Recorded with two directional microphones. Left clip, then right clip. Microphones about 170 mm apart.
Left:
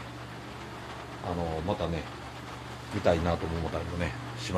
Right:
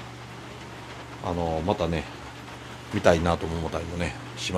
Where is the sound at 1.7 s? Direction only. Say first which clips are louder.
Right 6 dB; 40° right (ahead or behind).